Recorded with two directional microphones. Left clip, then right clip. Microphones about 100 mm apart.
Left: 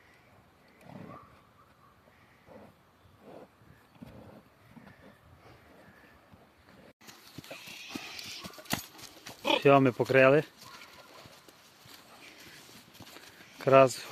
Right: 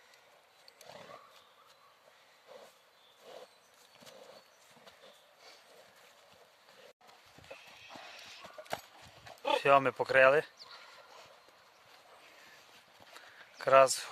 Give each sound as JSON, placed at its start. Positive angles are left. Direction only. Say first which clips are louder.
{"t": 0.9, "sound": "wild animals", "louder": "left 1 dB", "side_deg": 0}
{"t": 9.4, "sound": "speech", "louder": "left 3 dB", "side_deg": -15}
{"t": 13.1, "sound": "a sound", "louder": "even", "side_deg": -10}